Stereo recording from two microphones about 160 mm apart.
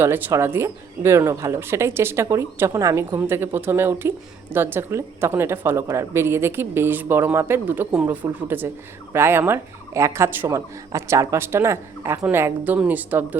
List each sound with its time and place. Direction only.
0.0 s speech: 15° right (ahead or behind)